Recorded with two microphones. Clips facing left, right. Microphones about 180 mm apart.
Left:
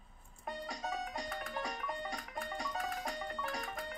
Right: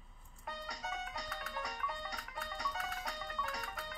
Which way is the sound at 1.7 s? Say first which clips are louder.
Left 2 dB; 50° left (ahead or behind).